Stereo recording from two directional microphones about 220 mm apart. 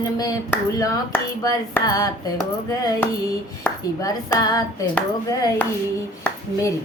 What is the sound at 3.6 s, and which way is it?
Hands, 15° left (ahead or behind).